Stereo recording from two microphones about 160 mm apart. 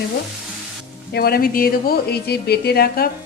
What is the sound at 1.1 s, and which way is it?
A woman's voice, 70° left (ahead or behind).